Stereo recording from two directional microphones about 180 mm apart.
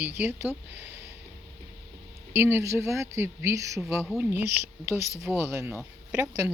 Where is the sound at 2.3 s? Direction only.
15° right (ahead or behind).